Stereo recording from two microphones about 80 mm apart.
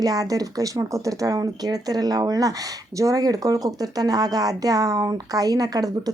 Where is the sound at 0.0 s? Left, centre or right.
Right.